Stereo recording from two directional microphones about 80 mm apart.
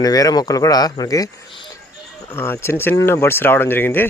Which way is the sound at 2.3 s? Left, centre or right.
Left.